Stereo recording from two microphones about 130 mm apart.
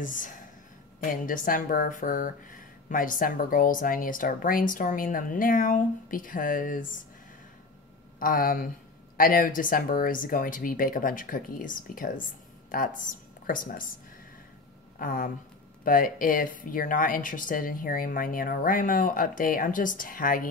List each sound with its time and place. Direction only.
0.0 s speech: 90° left
8.2 s speech: 90° left
15.0 s speech: 90° left